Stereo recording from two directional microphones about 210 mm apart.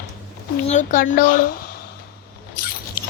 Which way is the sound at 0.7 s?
35° left (ahead or behind).